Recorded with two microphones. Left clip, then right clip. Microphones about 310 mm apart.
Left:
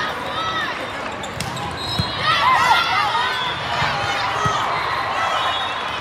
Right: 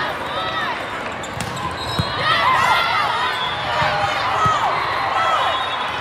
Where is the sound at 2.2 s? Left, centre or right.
Right.